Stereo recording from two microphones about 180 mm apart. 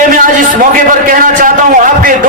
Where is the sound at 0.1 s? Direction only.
50° right (ahead or behind).